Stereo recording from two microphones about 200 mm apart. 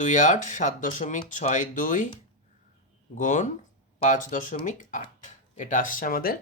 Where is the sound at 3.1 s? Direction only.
40° left (ahead or behind).